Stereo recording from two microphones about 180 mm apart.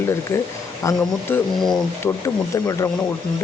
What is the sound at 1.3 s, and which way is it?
Speech, centre (ahead or behind).